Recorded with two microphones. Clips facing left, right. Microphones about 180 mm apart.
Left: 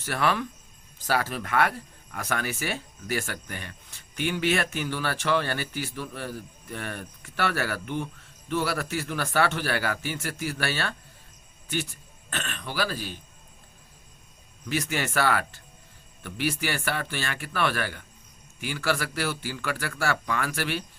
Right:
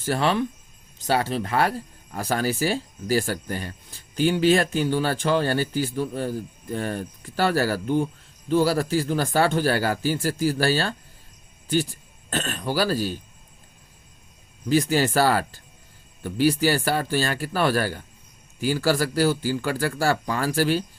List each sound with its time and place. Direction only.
0.0 s speech: 30° right (ahead or behind)
14.7 s speech: 30° right (ahead or behind)